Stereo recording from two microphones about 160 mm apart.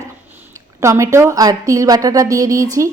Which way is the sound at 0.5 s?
20° right (ahead or behind).